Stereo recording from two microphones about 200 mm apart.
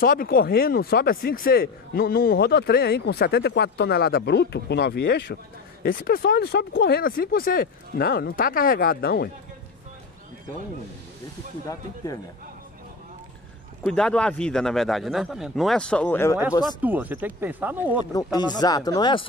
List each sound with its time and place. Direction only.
0.0 s speech: 45° left (ahead or behind)
13.8 s a man's voice: 5° left (ahead or behind)
16.8 s speech: 10° right (ahead or behind)
18.1 s speech: 20° left (ahead or behind)